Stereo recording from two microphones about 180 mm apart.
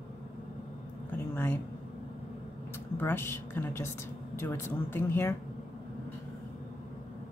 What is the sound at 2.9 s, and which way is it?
A woman's voice, 10° left (ahead or behind).